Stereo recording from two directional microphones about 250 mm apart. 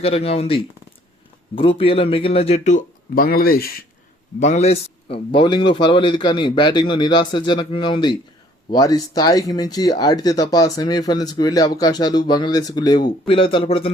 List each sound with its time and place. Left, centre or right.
0.0 s a man's voice: left